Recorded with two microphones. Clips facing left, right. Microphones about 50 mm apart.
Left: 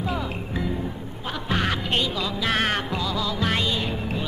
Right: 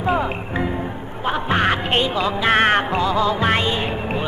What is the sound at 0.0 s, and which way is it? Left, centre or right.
Music, right.